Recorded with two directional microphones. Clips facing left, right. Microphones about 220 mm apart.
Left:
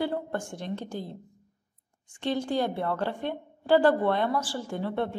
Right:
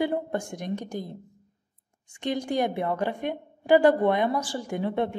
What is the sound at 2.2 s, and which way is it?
A woman's voice, 15° right (ahead or behind).